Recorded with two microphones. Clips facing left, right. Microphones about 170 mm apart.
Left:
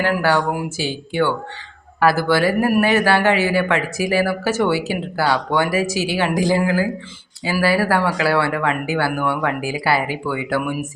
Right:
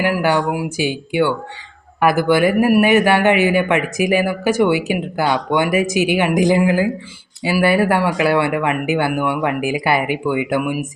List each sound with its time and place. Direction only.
0.0 s a man's voice: 15° right (ahead or behind)